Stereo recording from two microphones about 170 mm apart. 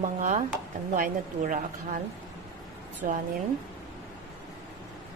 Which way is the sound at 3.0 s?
55° right (ahead or behind).